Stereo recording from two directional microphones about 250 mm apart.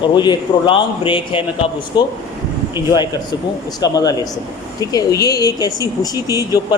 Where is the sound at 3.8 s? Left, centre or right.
Centre.